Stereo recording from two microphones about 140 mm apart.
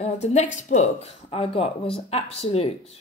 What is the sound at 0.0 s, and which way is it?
Speech, 55° left (ahead or behind).